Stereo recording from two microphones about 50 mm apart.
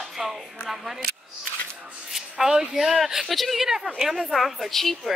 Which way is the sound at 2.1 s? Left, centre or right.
Centre.